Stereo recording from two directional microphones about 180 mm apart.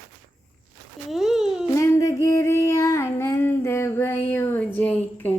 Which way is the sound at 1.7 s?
15° left (ahead or behind).